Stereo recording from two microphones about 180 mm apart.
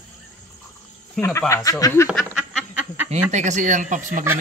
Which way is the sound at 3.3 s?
40° right (ahead or behind).